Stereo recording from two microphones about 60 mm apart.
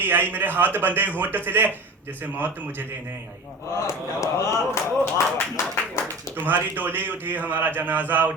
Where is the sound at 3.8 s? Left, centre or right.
Left.